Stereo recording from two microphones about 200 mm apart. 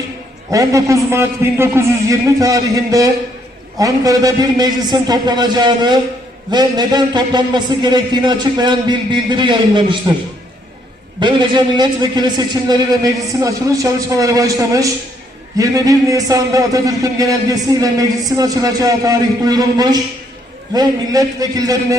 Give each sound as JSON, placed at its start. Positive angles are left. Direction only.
{"t": 0.5, "sound": "a man's voice", "side_deg": -15}
{"t": 11.2, "sound": "a man's voice", "side_deg": -25}